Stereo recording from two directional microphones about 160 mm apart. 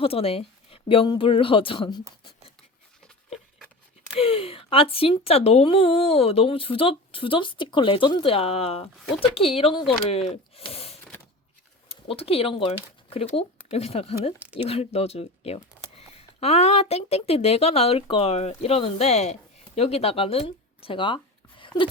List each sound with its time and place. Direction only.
0.0 s speech: 35° left (ahead or behind)
4.2 s speech: 35° left (ahead or behind)